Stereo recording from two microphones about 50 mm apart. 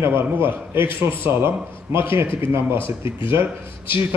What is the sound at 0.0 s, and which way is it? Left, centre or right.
A man's voice, right.